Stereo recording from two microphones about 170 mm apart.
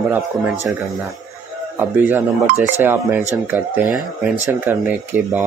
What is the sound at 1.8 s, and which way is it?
Speech, 10° right (ahead or behind).